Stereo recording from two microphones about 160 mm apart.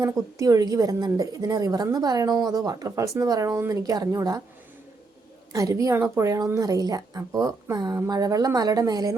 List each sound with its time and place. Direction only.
0.0 s a woman's voice: 20° right (ahead or behind)
5.5 s a woman's voice: 20° right (ahead or behind)